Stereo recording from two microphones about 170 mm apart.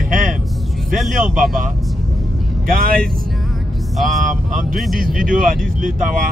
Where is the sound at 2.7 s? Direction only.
55° right (ahead or behind).